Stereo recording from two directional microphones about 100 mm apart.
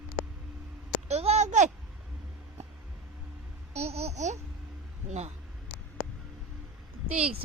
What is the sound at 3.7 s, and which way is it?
Babbling, 90° right.